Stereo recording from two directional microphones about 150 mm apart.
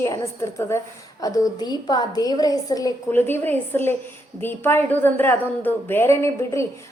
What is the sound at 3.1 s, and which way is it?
A woman's voice, 15° left (ahead or behind).